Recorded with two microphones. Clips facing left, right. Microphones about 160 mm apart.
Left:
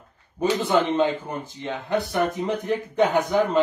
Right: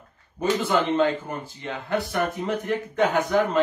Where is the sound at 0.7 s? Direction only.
15° left (ahead or behind).